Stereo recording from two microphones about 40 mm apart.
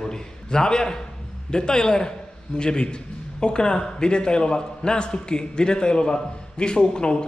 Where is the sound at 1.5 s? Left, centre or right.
Centre.